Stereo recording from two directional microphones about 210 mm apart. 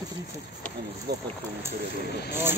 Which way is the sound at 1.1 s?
50° right (ahead or behind).